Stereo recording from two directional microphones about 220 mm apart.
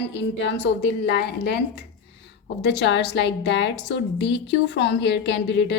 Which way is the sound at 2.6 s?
50° left (ahead or behind).